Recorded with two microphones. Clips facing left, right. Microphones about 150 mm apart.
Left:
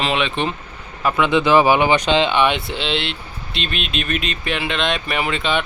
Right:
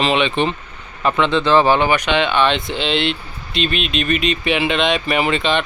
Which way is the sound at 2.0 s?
30° left (ahead or behind).